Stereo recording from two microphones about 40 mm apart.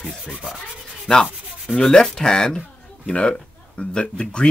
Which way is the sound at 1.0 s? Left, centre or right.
Centre.